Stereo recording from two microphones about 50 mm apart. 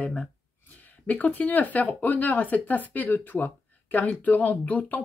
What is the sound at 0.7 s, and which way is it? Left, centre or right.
Speech, left.